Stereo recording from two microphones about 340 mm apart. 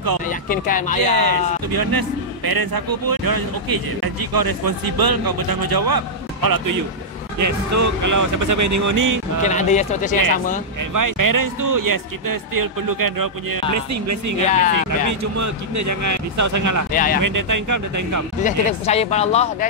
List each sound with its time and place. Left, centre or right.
0.3 s speech: left
1.0 s a man's voice: right
7.3 s speech: right
9.6 s speech: left
10.9 s speech: right
14.5 s speech: left
15.0 s speech: right
16.9 s speech: left
17.2 s speech: right
18.4 s speech: centre